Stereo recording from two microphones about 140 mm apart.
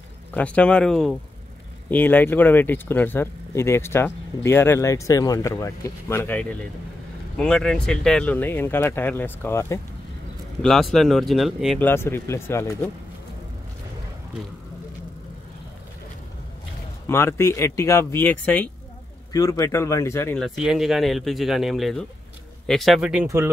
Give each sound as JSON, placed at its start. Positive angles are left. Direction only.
{"t": 0.3, "sound": "speech", "side_deg": 10}
{"t": 10.6, "sound": "speech", "side_deg": 0}
{"t": 11.8, "sound": "speech", "side_deg": 15}
{"t": 17.1, "sound": "speech", "side_deg": 20}
{"t": 19.3, "sound": "speech", "side_deg": 25}
{"t": 20.3, "sound": "speech", "side_deg": 0}
{"t": 23.2, "sound": "speech", "side_deg": -20}